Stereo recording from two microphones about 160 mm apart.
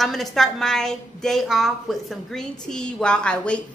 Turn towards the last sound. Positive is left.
turn(degrees=5)  # may be behind; listen again after turning